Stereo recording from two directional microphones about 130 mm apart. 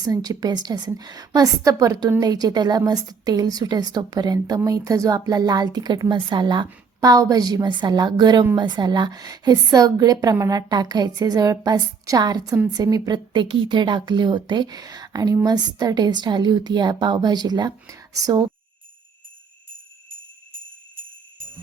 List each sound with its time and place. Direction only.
0.0 s a woman's voice: 30° right (ahead or behind)